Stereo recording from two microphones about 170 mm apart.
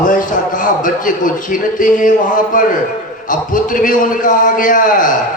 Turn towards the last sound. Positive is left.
turn(degrees=50)  # may be behind; listen again after turning